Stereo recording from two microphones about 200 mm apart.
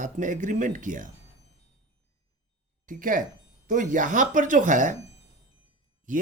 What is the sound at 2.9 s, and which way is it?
Speech, 40° right (ahead or behind).